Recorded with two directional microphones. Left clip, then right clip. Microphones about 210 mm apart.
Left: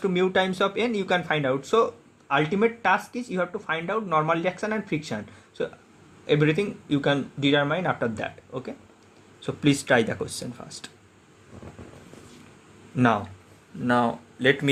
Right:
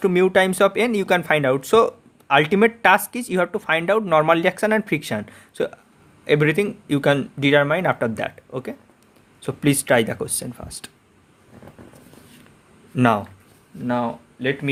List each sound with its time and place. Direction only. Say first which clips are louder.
0.0 s speech: right 6 dB; 35° right (ahead or behind)
13.0 s speech: right 4 dB; 30° right (ahead or behind)
13.8 s speech: left 1 dB; 10° right (ahead or behind)